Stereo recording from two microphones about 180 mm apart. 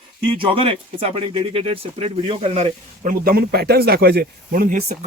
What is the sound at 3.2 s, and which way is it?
Speech, 55° right (ahead or behind).